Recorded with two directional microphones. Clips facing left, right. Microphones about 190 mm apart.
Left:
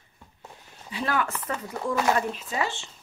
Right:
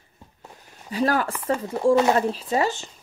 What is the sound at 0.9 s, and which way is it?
Speech, 40° right (ahead or behind).